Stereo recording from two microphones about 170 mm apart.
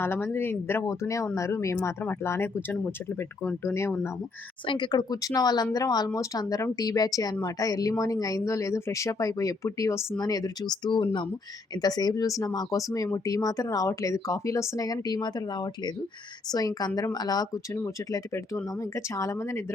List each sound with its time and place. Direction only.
0.0 s speech: 15° left (ahead or behind)
4.6 s speech: 30° left (ahead or behind)